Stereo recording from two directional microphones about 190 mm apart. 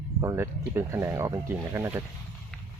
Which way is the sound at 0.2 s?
15° right (ahead or behind).